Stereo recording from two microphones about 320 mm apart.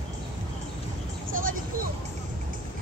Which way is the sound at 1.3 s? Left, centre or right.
Right.